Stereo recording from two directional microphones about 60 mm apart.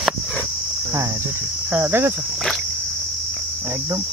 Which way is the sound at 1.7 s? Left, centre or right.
Right.